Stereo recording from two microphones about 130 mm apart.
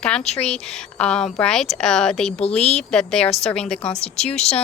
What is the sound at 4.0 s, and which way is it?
Speech, 55° left (ahead or behind).